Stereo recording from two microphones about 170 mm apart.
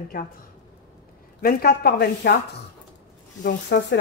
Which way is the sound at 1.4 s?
60° left (ahead or behind).